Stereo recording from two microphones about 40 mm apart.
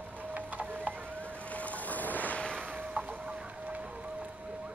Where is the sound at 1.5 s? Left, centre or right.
Left.